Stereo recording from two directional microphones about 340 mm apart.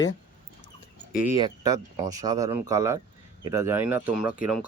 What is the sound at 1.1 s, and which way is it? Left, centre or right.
Speech, left.